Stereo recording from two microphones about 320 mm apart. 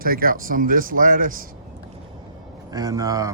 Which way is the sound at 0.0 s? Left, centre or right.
Right.